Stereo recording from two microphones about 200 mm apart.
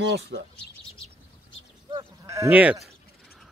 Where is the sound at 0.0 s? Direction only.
60° right (ahead or behind).